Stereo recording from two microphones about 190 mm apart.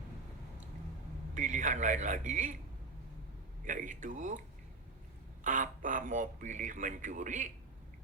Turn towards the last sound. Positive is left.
turn(degrees=-40)  # may be behind; listen again after turning